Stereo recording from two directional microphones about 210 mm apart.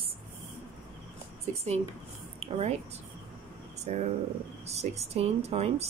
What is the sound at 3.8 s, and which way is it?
A woman's voice, 35° right (ahead or behind).